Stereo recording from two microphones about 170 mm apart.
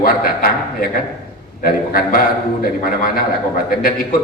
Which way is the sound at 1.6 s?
60° left (ahead or behind).